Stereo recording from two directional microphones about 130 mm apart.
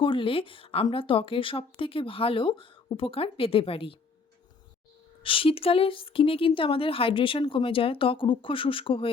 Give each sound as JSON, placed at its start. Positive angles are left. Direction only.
{"t": 0.0, "sound": "a woman's voice", "side_deg": 40}
{"t": 5.2, "sound": "a woman's voice", "side_deg": 45}